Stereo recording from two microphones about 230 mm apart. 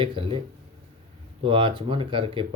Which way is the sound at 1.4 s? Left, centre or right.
Right.